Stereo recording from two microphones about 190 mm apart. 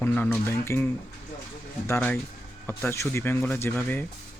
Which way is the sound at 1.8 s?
10° left (ahead or behind).